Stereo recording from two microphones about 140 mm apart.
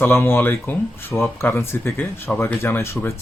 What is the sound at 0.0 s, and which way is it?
Speech, 15° left (ahead or behind).